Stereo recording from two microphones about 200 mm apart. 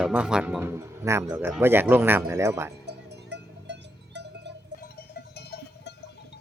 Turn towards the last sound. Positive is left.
turn(degrees=55)  # may be behind; listen again after turning